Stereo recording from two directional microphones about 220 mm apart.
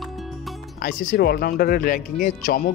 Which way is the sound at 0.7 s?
45° left (ahead or behind).